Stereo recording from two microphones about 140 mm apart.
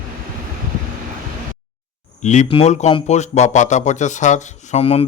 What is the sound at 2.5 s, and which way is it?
Speech, 50° left (ahead or behind).